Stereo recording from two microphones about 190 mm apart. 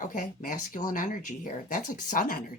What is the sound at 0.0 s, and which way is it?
Speech, 45° left (ahead or behind).